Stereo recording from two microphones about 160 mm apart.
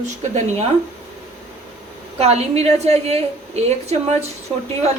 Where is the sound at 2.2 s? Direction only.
40° right (ahead or behind).